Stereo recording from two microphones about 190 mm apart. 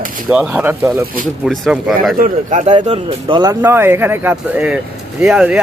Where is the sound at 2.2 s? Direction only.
40° right (ahead or behind).